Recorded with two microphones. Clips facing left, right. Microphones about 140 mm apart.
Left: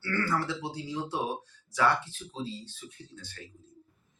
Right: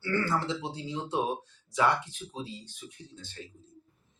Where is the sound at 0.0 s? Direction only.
20° right (ahead or behind).